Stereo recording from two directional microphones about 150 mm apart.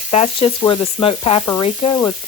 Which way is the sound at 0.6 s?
25° left (ahead or behind).